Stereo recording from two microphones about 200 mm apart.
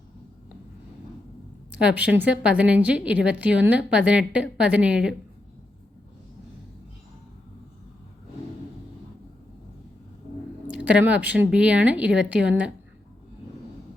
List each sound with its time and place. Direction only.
1.8 s speech: 5° right (ahead or behind)
10.7 s a woman's voice: 5° right (ahead or behind)